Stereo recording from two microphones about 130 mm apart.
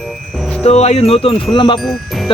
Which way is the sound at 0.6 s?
55° left (ahead or behind).